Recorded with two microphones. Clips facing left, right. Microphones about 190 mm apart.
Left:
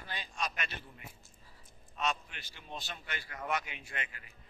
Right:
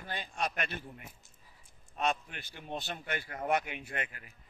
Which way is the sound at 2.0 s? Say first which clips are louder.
Right 3 dB; 55° right (ahead or behind).